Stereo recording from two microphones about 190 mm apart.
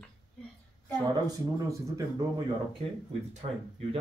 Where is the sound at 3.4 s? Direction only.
35° right (ahead or behind).